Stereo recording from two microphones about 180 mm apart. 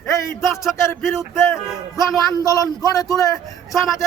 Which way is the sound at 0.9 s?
10° left (ahead or behind).